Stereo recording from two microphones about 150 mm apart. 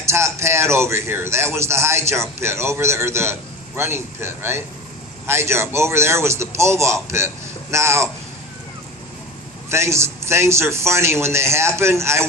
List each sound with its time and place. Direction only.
0.1 s a man's voice: 20° right (ahead or behind)
9.6 s a man's voice: 20° right (ahead or behind)